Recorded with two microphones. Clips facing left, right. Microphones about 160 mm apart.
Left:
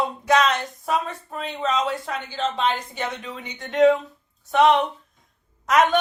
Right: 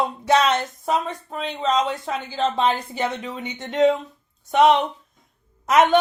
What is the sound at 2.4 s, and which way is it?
A woman's voice, 35° right (ahead or behind).